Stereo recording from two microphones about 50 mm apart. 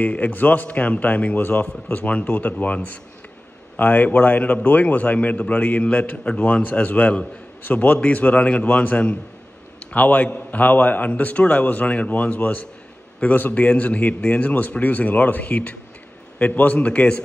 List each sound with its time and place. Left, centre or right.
0.0 s a man's voice: left